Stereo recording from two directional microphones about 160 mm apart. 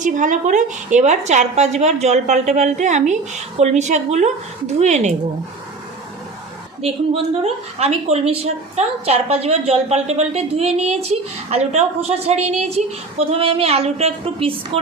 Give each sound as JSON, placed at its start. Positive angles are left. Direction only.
{"t": 0.0, "sound": "a woman's voice", "side_deg": -50}
{"t": 6.8, "sound": "a woman's voice", "side_deg": -40}